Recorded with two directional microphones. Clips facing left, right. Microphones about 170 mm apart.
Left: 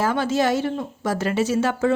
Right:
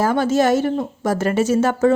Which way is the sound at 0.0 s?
45° right (ahead or behind).